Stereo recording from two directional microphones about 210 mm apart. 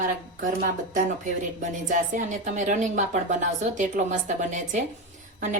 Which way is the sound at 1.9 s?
35° right (ahead or behind).